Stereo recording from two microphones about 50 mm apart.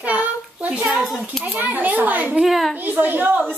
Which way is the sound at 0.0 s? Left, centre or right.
Right.